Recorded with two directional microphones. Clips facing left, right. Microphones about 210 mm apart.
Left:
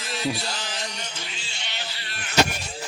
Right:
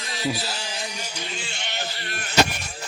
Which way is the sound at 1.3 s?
55° right (ahead or behind).